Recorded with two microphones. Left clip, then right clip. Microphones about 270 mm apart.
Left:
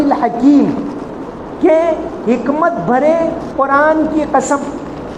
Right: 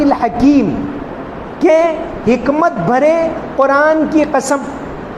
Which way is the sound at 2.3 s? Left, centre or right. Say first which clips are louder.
Right 1 dB; right.